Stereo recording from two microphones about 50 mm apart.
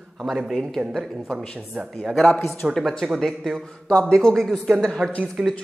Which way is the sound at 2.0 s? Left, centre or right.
Centre.